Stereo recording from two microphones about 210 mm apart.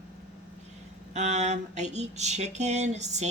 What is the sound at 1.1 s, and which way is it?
Speech, 35° right (ahead or behind).